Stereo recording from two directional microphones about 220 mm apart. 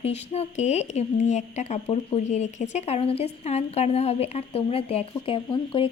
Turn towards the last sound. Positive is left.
turn(degrees=25)  # may be behind; listen again after turning